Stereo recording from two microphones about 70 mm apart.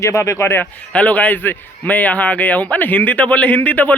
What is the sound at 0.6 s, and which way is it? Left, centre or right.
A man's voice, left.